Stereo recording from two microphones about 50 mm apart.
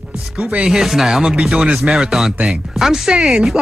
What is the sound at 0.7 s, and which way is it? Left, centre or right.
Speech, centre.